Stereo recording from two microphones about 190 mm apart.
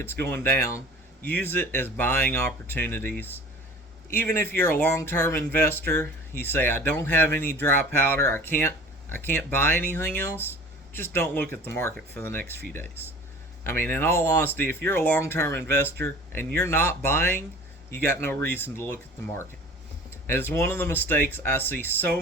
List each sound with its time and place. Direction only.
0.0 s speech: 10° left (ahead or behind)
13.7 s speech: 10° left (ahead or behind)
20.2 s speech: 10° left (ahead or behind)